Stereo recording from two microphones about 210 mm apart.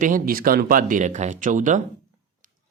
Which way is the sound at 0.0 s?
40° right (ahead or behind).